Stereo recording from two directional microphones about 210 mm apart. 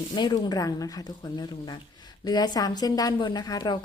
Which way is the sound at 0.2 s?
20° left (ahead or behind).